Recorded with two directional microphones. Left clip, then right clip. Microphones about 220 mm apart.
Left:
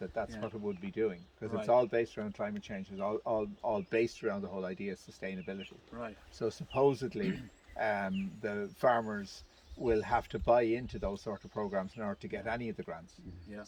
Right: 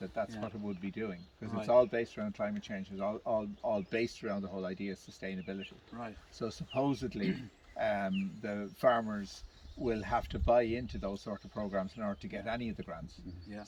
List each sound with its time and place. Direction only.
0.2 s speech: 20° left (ahead or behind)